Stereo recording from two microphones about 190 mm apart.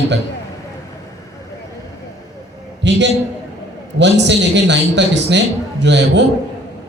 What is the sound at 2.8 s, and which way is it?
A man's voice, 65° right (ahead or behind).